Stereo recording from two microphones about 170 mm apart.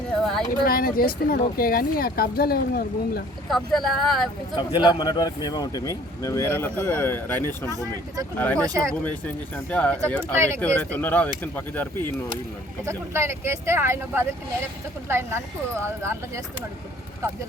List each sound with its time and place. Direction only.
0.1 s a sound: 5° left (ahead or behind)
0.6 s speech: 60° left (ahead or behind)
3.5 s speech: centre (ahead or behind)
4.5 s speech: 25° left (ahead or behind)
8.5 s speech: 20° right (ahead or behind)
9.0 s speech: 10° left (ahead or behind)
10.3 s speech: 15° right (ahead or behind)
10.8 s speech: 10° left (ahead or behind)
12.8 s speech: 15° right (ahead or behind)